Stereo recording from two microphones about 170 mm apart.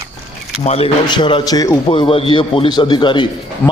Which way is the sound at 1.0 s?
25° left (ahead or behind).